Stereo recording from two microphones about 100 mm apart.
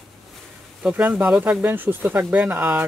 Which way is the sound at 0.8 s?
15° right (ahead or behind).